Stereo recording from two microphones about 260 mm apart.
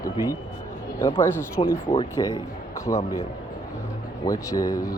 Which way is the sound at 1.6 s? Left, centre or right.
Left.